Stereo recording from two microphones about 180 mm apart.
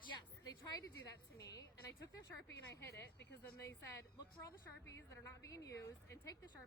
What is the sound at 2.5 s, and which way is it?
Speech, 70° left (ahead or behind).